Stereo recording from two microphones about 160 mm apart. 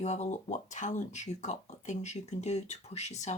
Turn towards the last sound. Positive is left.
turn(degrees=45)  # may be behind; listen again after turning